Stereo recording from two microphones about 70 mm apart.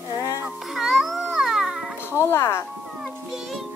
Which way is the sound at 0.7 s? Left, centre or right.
Centre.